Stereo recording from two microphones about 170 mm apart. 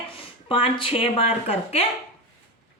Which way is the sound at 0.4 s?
30° left (ahead or behind).